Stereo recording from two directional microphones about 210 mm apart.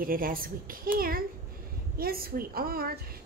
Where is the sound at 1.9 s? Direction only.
45° right (ahead or behind).